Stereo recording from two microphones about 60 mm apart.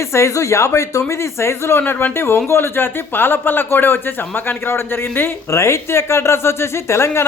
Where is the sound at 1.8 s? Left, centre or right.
Left.